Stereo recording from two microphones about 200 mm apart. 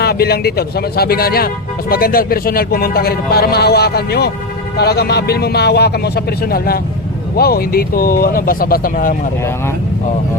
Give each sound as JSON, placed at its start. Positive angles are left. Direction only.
{"t": 0.0, "sound": "a man's voice", "side_deg": 50}